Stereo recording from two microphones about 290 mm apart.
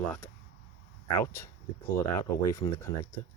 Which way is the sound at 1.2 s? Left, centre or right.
Centre.